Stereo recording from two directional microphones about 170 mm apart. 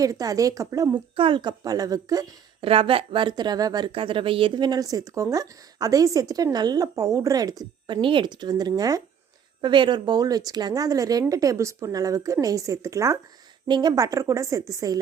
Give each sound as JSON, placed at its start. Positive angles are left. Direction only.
{"t": 0.0, "sound": "speech", "side_deg": -20}
{"t": 1.1, "sound": "speech", "side_deg": -30}
{"t": 2.6, "sound": "speech", "side_deg": -35}